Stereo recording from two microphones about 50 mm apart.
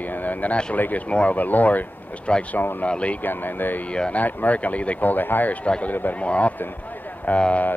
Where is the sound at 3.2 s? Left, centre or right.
Left.